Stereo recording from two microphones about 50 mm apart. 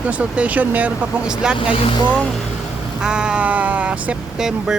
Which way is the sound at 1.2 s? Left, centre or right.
Centre.